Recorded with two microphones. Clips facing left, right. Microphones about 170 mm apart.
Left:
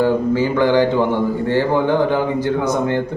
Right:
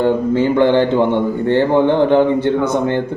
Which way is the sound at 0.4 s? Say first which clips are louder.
Right 3 dB; 20° right (ahead or behind).